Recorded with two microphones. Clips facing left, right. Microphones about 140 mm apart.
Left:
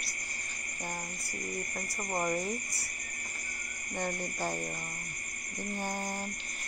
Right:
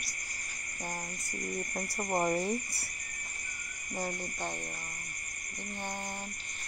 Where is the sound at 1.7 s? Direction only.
20° right (ahead or behind).